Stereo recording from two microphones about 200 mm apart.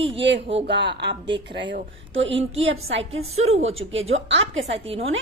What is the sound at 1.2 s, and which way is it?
Speech, 25° right (ahead or behind).